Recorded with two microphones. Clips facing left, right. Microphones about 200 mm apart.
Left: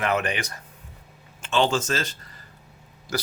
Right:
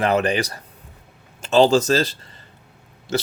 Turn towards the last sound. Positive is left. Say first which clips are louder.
# right 6 dB
turn(degrees=-25)  # may be behind; listen again after turning